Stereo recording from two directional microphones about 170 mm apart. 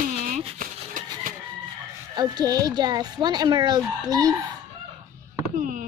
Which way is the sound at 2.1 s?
25° right (ahead or behind).